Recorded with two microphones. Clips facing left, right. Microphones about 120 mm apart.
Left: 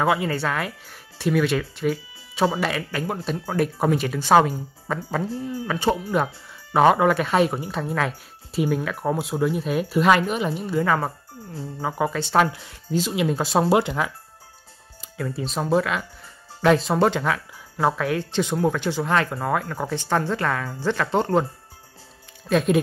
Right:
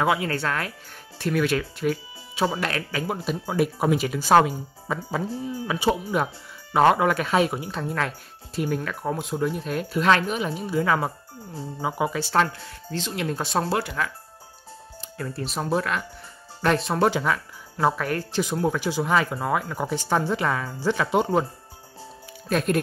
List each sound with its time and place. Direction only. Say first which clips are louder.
0.0 s speech: left 2 dB; centre (ahead or behind)
12.6 s speech: left 6 dB; 10° left (ahead or behind)
13.7 s speech: left 6 dB; 20° left (ahead or behind)
15.0 s speech: left 3 dB; centre (ahead or behind)
22.5 s speech: left 3 dB; centre (ahead or behind)